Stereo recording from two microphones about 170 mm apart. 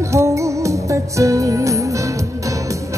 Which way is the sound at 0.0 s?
15° right (ahead or behind).